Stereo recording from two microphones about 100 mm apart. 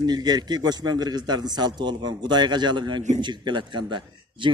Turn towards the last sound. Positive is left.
turn(degrees=-50)  # may be behind; listen again after turning